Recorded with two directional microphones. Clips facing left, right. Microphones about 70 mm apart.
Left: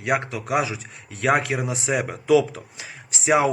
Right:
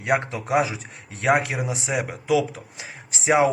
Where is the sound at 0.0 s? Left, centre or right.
Right.